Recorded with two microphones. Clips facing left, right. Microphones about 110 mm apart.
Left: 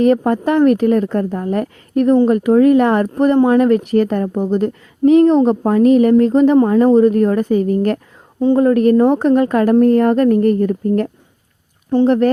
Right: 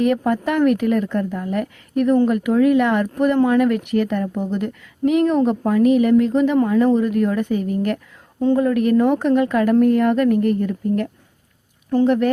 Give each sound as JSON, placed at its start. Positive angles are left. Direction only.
{"t": 0.0, "sound": "a woman's voice", "side_deg": 35}
{"t": 3.3, "sound": "speech", "side_deg": 20}
{"t": 3.7, "sound": "a woman's voice", "side_deg": 35}